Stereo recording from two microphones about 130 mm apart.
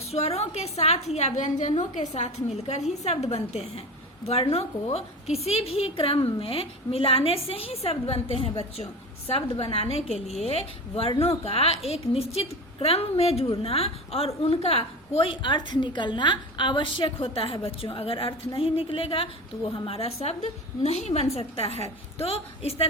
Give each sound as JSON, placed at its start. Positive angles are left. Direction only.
{"t": 0.1, "sound": "a woman's voice", "side_deg": 50}